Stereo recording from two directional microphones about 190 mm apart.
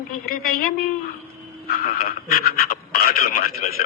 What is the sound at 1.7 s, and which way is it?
A man's voice, 50° left (ahead or behind).